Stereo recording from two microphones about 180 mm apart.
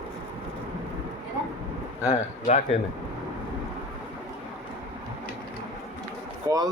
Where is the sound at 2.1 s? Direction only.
40° left (ahead or behind).